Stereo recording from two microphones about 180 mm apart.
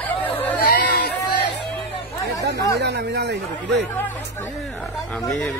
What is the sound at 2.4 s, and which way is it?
Speech, 70° right (ahead or behind).